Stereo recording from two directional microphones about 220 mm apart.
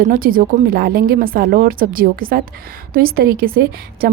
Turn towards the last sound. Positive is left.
turn(degrees=-40)  # may be behind; listen again after turning